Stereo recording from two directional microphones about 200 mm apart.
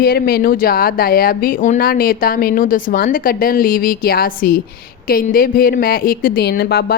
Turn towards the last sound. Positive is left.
turn(degrees=55)  # may be behind; listen again after turning